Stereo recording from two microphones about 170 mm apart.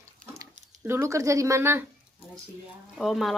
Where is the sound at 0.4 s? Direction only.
15° right (ahead or behind).